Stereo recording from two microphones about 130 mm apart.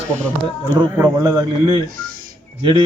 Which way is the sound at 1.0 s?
30° right (ahead or behind).